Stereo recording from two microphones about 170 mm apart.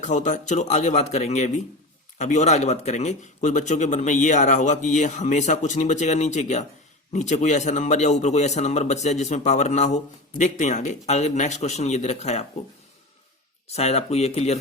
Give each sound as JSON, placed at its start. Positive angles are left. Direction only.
{"t": 0.0, "sound": "a man's voice", "side_deg": 45}
{"t": 13.7, "sound": "speech", "side_deg": 40}